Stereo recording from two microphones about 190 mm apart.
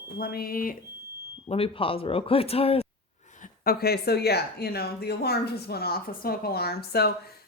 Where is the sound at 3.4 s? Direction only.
50° left (ahead or behind).